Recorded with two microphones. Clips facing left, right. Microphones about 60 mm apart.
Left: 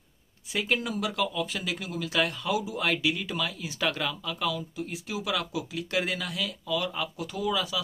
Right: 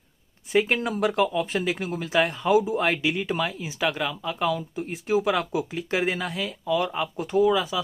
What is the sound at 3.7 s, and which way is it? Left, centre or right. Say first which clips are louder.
Speech: right 3 dB; centre.